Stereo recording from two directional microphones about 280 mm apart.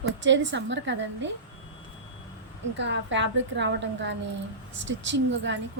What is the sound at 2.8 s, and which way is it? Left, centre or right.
A woman's voice, right.